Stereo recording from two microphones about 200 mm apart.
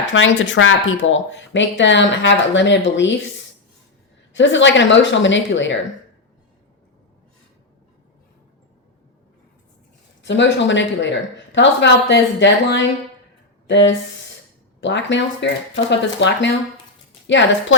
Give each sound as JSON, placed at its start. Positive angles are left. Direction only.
{"t": 0.1, "sound": "speech", "side_deg": 70}
{"t": 4.4, "sound": "speech", "side_deg": 65}
{"t": 10.2, "sound": "speech", "side_deg": 65}